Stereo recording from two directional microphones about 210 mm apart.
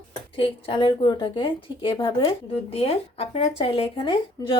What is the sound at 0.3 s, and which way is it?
A woman's voice, 25° left (ahead or behind).